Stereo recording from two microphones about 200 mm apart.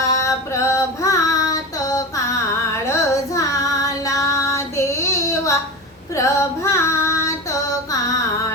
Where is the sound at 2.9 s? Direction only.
15° left (ahead or behind).